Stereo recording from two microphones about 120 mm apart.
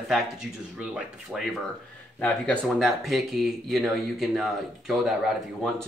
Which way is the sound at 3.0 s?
Centre (ahead or behind).